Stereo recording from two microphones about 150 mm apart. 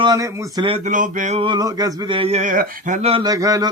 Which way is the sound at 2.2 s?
50° right (ahead or behind).